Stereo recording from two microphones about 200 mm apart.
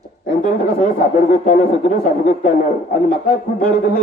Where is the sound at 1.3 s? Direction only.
40° left (ahead or behind).